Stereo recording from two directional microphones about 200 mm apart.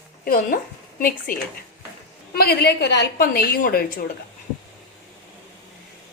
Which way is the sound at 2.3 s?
50° left (ahead or behind).